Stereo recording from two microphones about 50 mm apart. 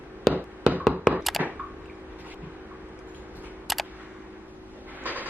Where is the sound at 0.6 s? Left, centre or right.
Right.